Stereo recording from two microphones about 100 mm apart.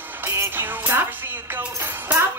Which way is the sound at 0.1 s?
25° right (ahead or behind).